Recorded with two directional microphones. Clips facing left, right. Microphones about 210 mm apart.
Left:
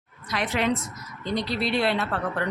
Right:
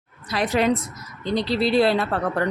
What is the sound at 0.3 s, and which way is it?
A woman's voice, 35° right (ahead or behind).